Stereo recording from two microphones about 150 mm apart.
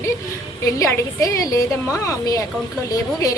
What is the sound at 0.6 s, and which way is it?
A woman's voice, 20° left (ahead or behind).